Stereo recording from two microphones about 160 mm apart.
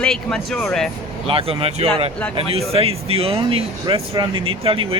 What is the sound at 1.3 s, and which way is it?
Speech, 35° right (ahead or behind).